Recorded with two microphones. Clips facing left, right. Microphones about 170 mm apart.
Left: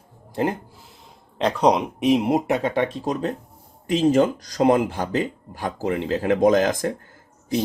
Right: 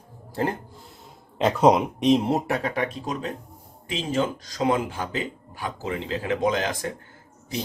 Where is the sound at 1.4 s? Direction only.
5° right (ahead or behind); by 2.9 s 25° left (ahead or behind).